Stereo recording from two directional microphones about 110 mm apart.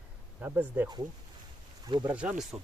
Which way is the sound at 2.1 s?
10° right (ahead or behind).